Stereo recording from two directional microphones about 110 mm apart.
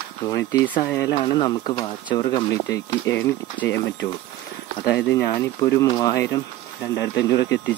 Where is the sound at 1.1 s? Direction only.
45° left (ahead or behind); by 3.8 s 25° left (ahead or behind).